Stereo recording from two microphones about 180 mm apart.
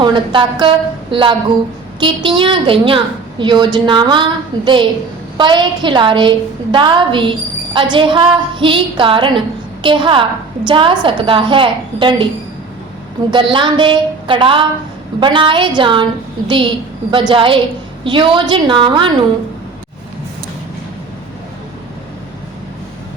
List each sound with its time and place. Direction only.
0.0 s a woman's voice: 25° right (ahead or behind)
13.3 s a woman's voice: 25° right (ahead or behind)